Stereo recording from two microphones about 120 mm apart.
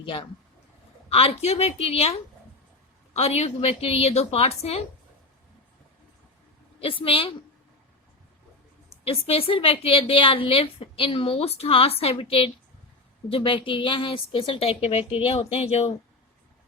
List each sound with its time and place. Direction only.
0.0 s speech: 45° left (ahead or behind)
1.1 s a woman's voice: 55° left (ahead or behind)
6.7 s a woman's voice: 50° left (ahead or behind)
9.0 s a woman's voice: 55° left (ahead or behind)